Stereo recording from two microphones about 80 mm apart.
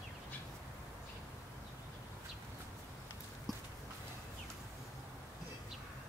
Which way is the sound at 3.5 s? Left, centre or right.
Centre.